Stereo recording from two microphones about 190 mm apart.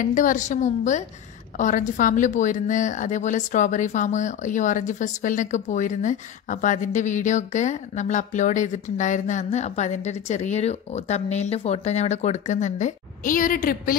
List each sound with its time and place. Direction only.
0.0 s a woman's voice: 45° left (ahead or behind)